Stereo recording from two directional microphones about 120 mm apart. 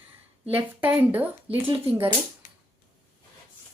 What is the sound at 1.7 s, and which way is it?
Speech, 50° right (ahead or behind).